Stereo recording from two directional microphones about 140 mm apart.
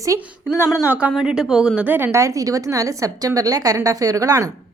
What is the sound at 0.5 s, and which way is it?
Speech, 20° left (ahead or behind).